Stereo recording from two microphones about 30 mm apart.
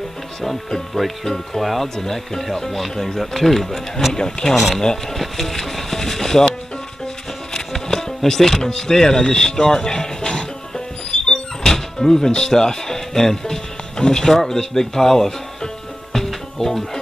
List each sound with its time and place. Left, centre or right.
0.9 s speech: centre
2.0 s speech: centre
4.1 s speech: left
5.1 s speech: centre
7.5 s speech: centre
11.1 s music: centre